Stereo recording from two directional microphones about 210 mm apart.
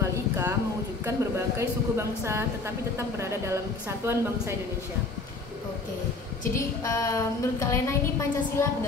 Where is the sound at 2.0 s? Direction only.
15° right (ahead or behind).